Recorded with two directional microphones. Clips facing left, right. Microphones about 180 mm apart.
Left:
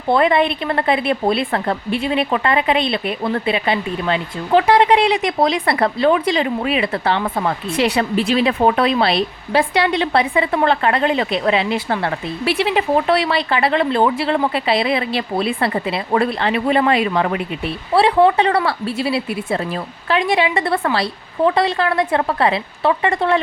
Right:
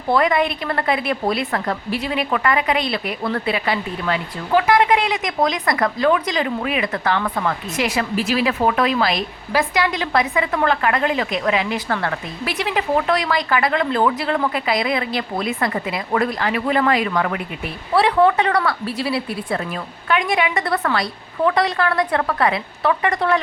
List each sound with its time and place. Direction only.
0.1 s speech: 25° left (ahead or behind)